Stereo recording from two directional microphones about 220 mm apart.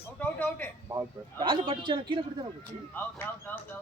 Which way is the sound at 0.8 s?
20° right (ahead or behind).